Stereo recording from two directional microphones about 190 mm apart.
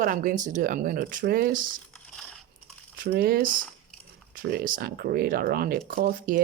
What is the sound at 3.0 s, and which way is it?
Speech, 55° right (ahead or behind).